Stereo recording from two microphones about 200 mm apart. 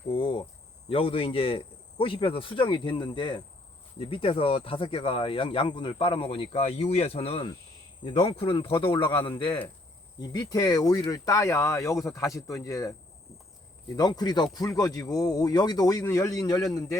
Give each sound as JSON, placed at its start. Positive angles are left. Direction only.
{"t": 0.1, "sound": "cricket", "side_deg": 25}
{"t": 0.9, "sound": "speech", "side_deg": 25}
{"t": 10.2, "sound": "speech", "side_deg": 20}
{"t": 13.9, "sound": "speech", "side_deg": 20}